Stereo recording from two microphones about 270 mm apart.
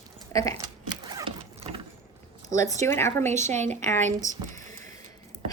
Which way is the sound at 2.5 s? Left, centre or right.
Centre.